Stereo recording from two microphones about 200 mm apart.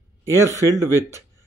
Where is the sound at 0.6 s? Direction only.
15° right (ahead or behind).